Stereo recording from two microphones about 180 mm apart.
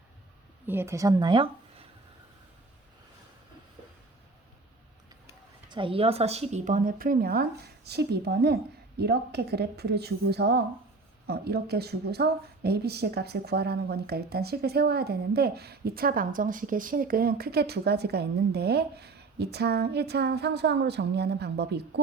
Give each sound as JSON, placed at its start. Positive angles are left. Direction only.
{"t": 0.7, "sound": "speech", "side_deg": -15}
{"t": 5.6, "sound": "speech", "side_deg": -25}